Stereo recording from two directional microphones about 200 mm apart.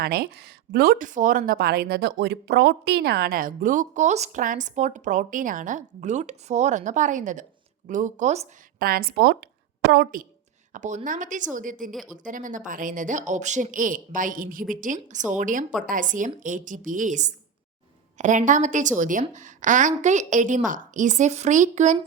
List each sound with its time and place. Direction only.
0.0 s speech: 50° right (ahead or behind); by 8.4 s 35° right (ahead or behind)
8.8 s speech: 50° right (ahead or behind)